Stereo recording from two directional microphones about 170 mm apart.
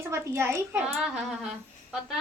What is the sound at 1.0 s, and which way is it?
Speech, centre (ahead or behind).